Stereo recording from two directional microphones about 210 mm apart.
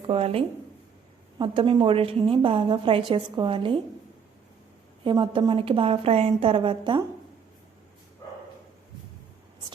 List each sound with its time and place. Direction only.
0.1 s a woman's voice: 30° right (ahead or behind)
5.0 s a woman's voice: 25° right (ahead or behind)